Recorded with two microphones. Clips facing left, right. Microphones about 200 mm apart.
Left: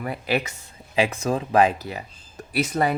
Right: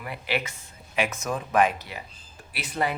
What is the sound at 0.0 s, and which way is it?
Speech, 40° left (ahead or behind).